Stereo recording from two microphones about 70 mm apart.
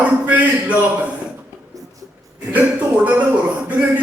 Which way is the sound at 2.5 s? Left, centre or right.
Right.